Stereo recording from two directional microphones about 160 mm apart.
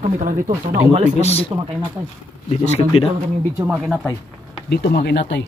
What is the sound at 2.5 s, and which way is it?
Speech, 40° left (ahead or behind).